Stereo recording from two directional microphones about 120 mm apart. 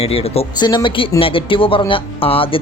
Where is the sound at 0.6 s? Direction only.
40° left (ahead or behind).